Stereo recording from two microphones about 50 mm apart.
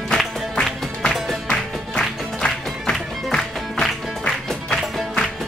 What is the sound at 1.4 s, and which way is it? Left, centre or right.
Music, centre.